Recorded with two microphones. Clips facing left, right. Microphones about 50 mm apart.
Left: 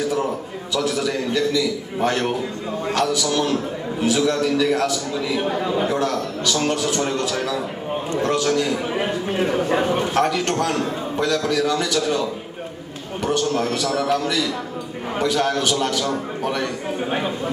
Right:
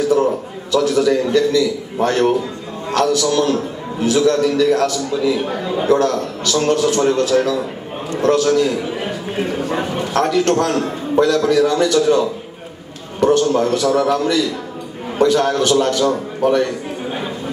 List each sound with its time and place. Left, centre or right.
0.7 s a man's voice: centre
10.1 s a man's voice: centre